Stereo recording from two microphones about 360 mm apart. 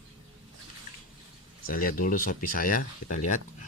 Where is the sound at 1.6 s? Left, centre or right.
Left.